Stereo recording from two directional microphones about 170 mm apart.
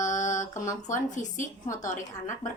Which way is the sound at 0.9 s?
50° left (ahead or behind).